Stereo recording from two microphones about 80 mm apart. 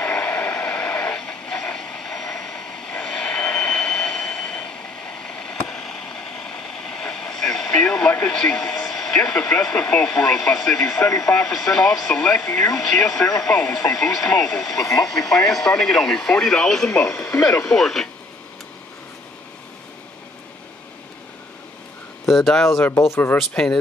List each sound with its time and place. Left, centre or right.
0.0 s vehicle: centre
5.6 s train: centre
15.0 s speech: centre
17.4 s speech: left
17.6 s speech: centre
22.3 s speech: centre
22.7 s speech: left
23.5 s speech: centre